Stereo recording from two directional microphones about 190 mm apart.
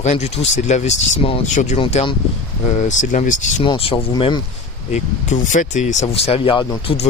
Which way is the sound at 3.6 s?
30° left (ahead or behind).